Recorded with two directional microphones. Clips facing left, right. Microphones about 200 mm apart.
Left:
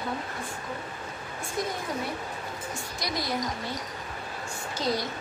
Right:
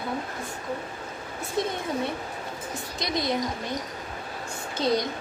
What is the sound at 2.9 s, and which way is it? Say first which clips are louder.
Speech: right 4 dB; 20° right (ahead or behind).